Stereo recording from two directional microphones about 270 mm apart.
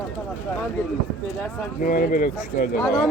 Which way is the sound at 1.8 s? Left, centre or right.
Left.